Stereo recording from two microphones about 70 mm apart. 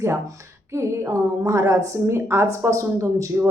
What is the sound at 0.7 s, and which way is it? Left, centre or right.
A woman's voice, right.